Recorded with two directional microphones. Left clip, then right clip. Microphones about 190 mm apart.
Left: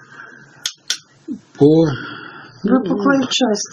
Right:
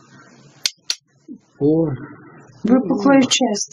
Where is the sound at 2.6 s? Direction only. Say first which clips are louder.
Even; 45° right (ahead or behind).